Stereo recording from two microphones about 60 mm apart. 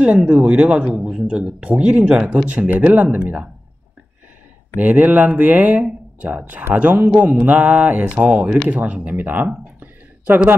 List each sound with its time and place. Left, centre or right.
0.0 s speech: right
4.7 s speech: right
9.8 s a sound: right